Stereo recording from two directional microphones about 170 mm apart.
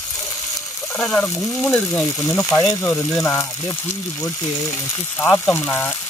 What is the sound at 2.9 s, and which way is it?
Stir, 5° left (ahead or behind).